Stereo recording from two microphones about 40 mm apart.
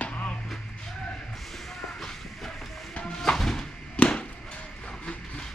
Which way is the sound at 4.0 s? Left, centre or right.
Left.